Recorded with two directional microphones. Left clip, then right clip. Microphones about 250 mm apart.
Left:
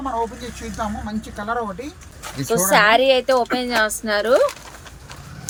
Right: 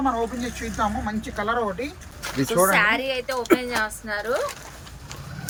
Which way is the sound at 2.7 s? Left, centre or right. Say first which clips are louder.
Left 11 dB; left.